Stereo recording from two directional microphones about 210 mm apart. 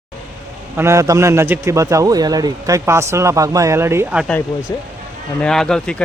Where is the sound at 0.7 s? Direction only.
15° right (ahead or behind).